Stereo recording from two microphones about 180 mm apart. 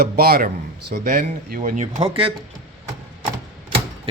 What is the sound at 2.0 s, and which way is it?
Speech, 30° right (ahead or behind).